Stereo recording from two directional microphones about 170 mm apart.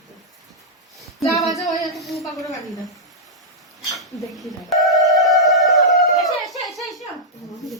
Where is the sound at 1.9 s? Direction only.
Centre (ahead or behind).